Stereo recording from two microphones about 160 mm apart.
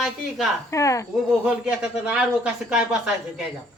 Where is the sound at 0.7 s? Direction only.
20° left (ahead or behind).